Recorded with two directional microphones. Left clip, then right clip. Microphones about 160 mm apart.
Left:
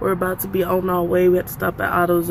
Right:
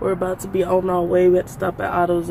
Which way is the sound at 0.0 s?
5° left (ahead or behind).